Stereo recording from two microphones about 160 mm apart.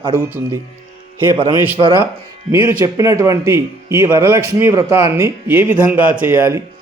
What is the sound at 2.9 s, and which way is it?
A man's voice, 20° right (ahead or behind).